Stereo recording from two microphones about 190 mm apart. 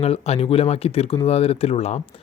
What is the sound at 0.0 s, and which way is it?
Speech, 30° left (ahead or behind).